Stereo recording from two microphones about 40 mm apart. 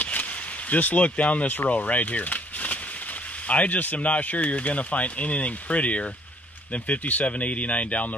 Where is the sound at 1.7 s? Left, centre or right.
Left.